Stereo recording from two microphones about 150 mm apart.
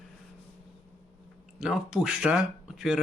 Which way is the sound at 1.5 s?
5° right (ahead or behind).